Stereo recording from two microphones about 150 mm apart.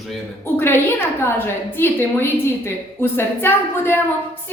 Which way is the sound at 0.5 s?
15° left (ahead or behind).